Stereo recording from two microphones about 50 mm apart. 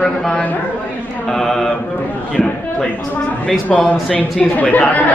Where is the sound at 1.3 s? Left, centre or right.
Centre.